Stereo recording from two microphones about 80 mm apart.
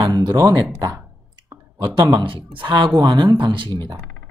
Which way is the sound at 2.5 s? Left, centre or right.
Right.